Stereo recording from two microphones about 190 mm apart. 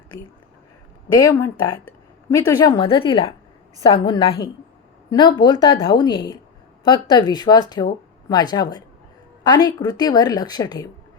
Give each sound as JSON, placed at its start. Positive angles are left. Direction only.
{"t": 1.1, "sound": "a woman's voice", "side_deg": 20}